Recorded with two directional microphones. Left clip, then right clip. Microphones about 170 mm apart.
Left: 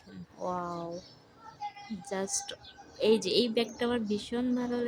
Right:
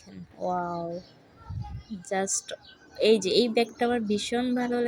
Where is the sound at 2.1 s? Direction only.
15° right (ahead or behind).